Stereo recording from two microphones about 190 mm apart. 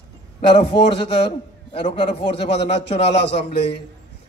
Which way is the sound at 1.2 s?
25° left (ahead or behind).